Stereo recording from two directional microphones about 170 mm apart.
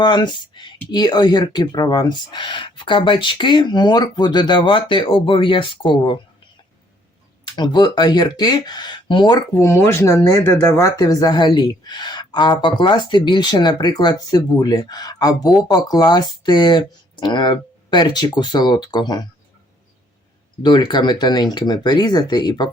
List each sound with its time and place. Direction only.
0.0 s speech: 25° left (ahead or behind)
7.4 s speech: 25° left (ahead or behind)
20.6 s speech: 25° left (ahead or behind)